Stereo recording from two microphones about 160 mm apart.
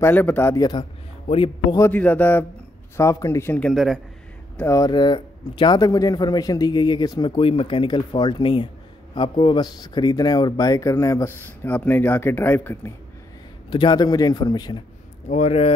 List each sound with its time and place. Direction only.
0.0 s a man's voice: 10° left (ahead or behind)
1.2 s a man's voice: 35° left (ahead or behind)
1.8 s a man's voice: 10° left (ahead or behind)
4.6 s speech: 20° left (ahead or behind)
13.7 s speech: 30° left (ahead or behind)
15.2 s speech: 45° left (ahead or behind)